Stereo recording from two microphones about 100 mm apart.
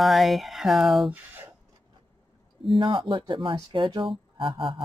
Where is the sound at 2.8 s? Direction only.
55° right (ahead or behind).